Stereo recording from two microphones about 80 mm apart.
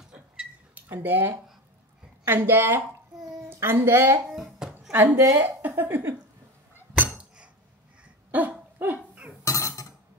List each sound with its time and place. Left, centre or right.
0.0 s a sound: centre
0.7 s speech: right
4.3 s a sound: centre
5.1 s speech: right
8.3 s dog: right
9.4 s dishes: left